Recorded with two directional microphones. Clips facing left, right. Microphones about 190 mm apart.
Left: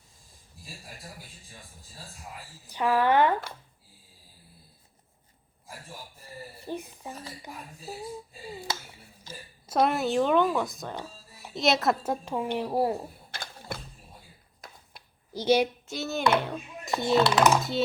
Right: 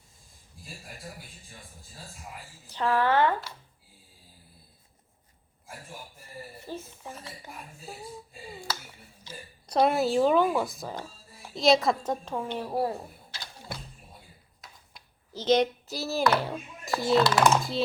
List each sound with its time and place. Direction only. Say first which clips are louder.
2.7 s speech: left 1 dB; 15° left (ahead or behind)
6.7 s a woman's voice: left 4 dB; 15° left (ahead or behind)
9.6 s speech: right 1 dB; centre (ahead or behind); by 13.0 s 20° left (ahead or behind)
13.3 s a sound: left 2 dB; 50° left (ahead or behind)
15.3 s speech: even; 10° left (ahead or behind)
15.9 s speech: even; centre (ahead or behind)